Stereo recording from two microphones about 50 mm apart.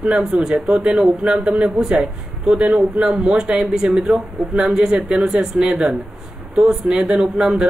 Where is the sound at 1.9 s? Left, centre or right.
Centre.